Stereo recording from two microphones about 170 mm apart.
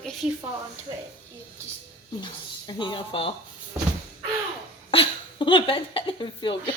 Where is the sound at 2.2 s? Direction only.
25° left (ahead or behind).